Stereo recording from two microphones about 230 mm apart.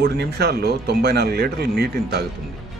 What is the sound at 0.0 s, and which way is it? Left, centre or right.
A man's voice, right.